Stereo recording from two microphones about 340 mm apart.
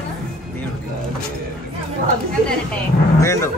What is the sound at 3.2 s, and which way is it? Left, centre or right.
Speech, centre.